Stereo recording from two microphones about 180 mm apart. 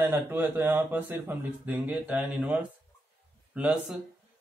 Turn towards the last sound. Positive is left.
turn(degrees=-10)  # may be behind; listen again after turning